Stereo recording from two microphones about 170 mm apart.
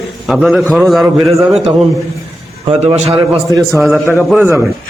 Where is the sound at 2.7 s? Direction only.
35° right (ahead or behind).